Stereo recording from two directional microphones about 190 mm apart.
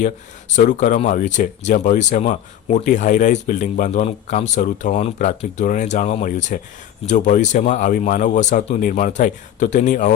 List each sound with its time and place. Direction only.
0.5 s speech: 40° left (ahead or behind)